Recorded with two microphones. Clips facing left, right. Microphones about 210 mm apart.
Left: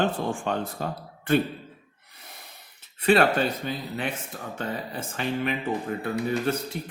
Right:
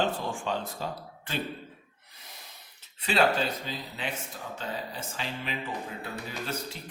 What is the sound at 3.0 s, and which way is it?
Speech, 55° left (ahead or behind).